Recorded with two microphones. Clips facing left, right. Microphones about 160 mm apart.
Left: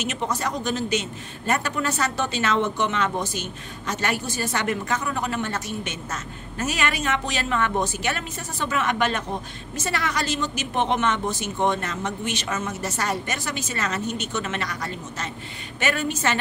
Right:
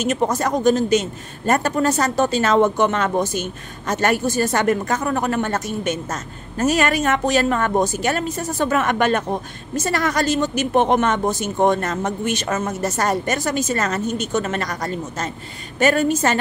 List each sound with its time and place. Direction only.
0.0 s a man's voice: 45° right (ahead or behind)